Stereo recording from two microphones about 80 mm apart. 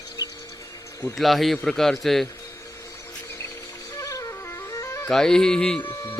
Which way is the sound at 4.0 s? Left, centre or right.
Left.